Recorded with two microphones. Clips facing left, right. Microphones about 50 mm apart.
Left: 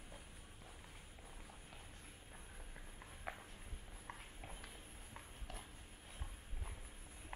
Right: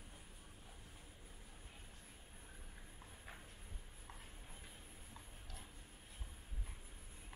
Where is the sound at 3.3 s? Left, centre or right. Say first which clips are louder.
Left 8 dB; left.